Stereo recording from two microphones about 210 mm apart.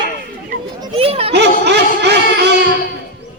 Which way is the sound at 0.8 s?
25° right (ahead or behind).